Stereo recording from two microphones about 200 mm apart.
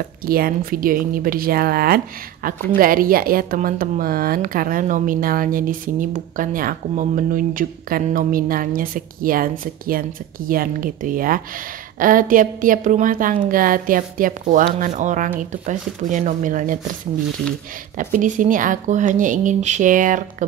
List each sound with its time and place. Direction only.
0.0 s speech: 45° right (ahead or behind)
17.9 s speech: 40° right (ahead or behind)